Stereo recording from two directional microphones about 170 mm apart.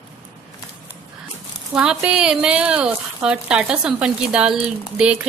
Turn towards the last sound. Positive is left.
turn(degrees=-5)  # may be behind; listen again after turning